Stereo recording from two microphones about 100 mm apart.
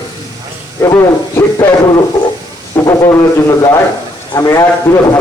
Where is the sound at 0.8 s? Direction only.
30° left (ahead or behind).